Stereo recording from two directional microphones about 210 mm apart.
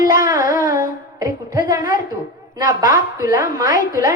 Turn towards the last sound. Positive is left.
turn(degrees=40)  # may be behind; listen again after turning